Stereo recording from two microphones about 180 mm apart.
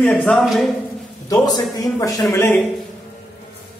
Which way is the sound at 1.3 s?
20° left (ahead or behind).